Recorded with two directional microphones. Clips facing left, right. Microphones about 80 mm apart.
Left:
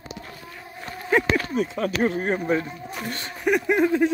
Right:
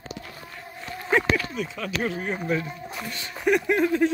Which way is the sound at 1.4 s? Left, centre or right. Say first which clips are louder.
Left 6 dB; left.